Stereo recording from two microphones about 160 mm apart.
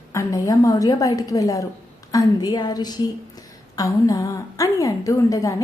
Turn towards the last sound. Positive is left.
turn(degrees=20)  # may be behind; listen again after turning